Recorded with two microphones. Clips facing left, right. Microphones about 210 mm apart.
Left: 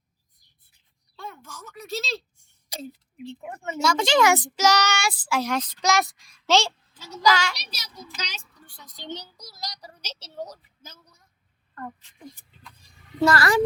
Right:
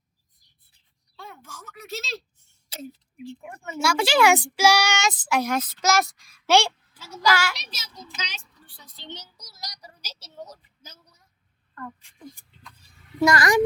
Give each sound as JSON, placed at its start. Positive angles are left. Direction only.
{"t": 1.1, "sound": "speech", "side_deg": 45}
{"t": 3.8, "sound": "a child's voice", "side_deg": -10}
{"t": 6.5, "sound": "a child's voice", "side_deg": -15}
{"t": 8.2, "sound": "a woman's voice", "side_deg": 40}
{"t": 9.0, "sound": "a sound", "side_deg": 35}
{"t": 10.8, "sound": "a sound", "side_deg": 50}
{"t": 11.9, "sound": "a child's voice", "side_deg": -10}